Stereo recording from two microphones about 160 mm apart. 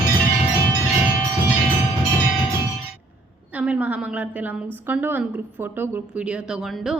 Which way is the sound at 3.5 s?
10° right (ahead or behind).